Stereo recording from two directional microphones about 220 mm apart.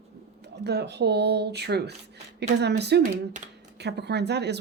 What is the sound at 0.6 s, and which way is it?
Speech, 50° right (ahead or behind).